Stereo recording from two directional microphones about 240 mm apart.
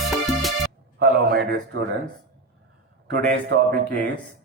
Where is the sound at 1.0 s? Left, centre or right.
Right.